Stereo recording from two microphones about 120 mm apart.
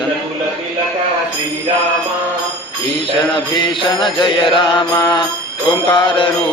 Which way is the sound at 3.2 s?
40° left (ahead or behind).